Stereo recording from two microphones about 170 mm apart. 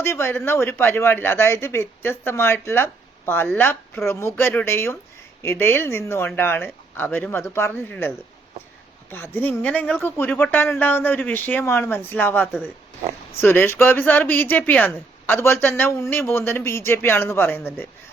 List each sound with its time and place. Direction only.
0.0 s speech: 15° left (ahead or behind)
9.1 s speech: 10° left (ahead or behind)